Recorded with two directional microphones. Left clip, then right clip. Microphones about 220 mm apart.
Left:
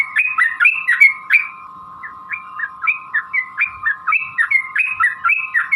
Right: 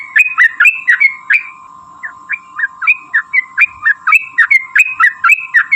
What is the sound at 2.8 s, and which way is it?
Bird, 25° right (ahead or behind).